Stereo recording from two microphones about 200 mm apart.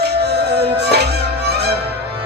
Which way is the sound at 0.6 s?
55° right (ahead or behind).